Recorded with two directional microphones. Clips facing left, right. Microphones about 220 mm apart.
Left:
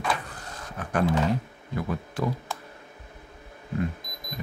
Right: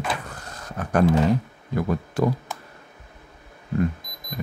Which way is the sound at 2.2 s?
45° right (ahead or behind).